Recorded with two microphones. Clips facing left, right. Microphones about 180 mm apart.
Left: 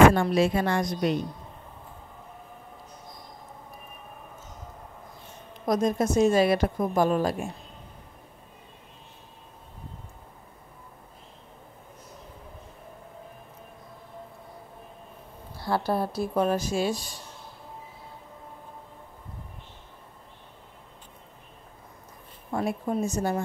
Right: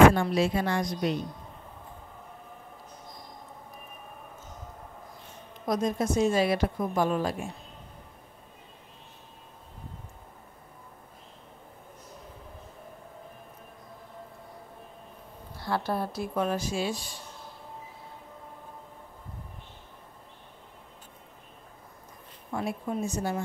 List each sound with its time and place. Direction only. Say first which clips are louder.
0.1 s a woman's voice: left 3 dB; 55° left (ahead or behind)
5.7 s a woman's voice: left 3 dB; 45° left (ahead or behind)
15.6 s speech: left 3 dB; 35° left (ahead or behind)
22.5 s a woman's voice: left 4 dB; 45° left (ahead or behind)